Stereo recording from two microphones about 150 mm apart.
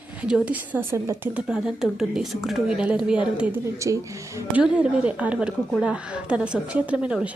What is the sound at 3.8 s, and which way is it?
Speech, 20° right (ahead or behind).